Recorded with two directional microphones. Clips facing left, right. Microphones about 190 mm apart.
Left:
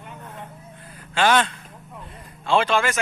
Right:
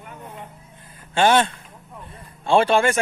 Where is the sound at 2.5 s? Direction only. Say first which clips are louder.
Right 4 dB; 30° right (ahead or behind).